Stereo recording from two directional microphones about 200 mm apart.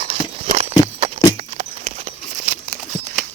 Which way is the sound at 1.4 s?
35° right (ahead or behind).